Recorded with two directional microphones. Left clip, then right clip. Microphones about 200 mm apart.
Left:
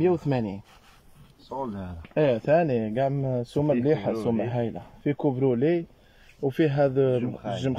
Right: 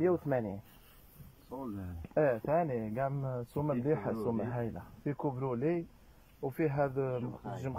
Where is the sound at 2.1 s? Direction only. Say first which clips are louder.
Left 8 dB; 15° left (ahead or behind).